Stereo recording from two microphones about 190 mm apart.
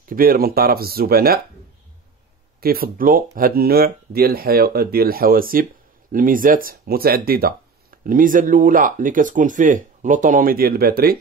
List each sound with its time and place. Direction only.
0.0 s speech: 50° right (ahead or behind)
2.6 s speech: 50° right (ahead or behind)